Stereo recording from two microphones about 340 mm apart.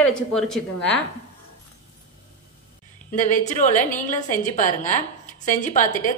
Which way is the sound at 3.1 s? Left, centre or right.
Left.